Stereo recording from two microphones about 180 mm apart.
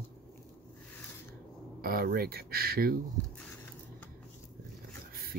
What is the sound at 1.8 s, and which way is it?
Speech, 55° right (ahead or behind).